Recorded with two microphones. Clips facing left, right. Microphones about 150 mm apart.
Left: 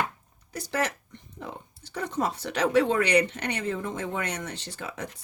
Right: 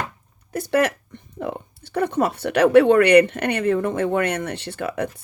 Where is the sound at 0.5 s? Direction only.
60° right (ahead or behind).